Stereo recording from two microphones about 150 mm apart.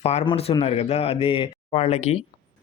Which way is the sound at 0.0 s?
45° left (ahead or behind).